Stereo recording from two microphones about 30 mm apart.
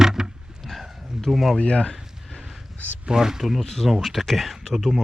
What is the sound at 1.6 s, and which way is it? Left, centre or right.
Speech, left.